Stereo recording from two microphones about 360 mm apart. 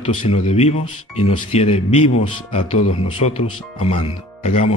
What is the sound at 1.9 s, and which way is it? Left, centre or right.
Speech, left.